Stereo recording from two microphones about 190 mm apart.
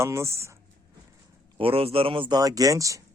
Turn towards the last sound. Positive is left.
turn(degrees=-15)  # may be behind; listen again after turning